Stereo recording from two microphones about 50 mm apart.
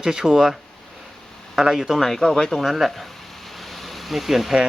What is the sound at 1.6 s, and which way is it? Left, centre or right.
Speech, centre.